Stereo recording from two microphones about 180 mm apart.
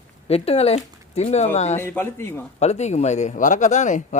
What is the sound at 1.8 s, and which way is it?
Speech, 15° left (ahead or behind).